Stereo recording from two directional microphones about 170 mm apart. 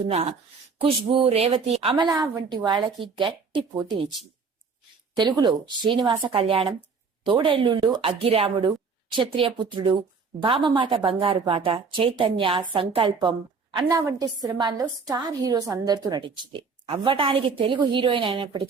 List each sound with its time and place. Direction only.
0.8 s a woman's voice: 30° right (ahead or behind)
2.0 s a woman's voice: 20° right (ahead or behind)
5.1 s a woman's voice: 25° right (ahead or behind)